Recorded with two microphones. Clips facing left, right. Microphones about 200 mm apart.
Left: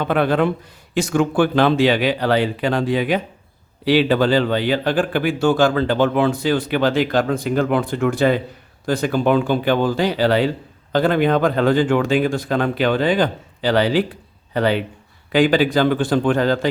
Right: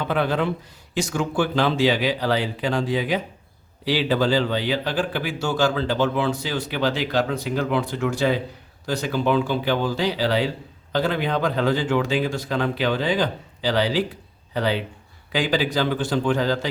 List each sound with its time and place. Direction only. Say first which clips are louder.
0.0 s a man's voice: left 5 dB; 55° left (ahead or behind)